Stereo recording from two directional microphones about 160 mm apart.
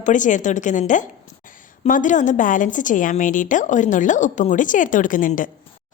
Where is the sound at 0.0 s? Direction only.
50° left (ahead or behind).